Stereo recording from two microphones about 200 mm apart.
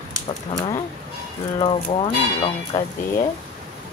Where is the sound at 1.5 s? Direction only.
25° left (ahead or behind).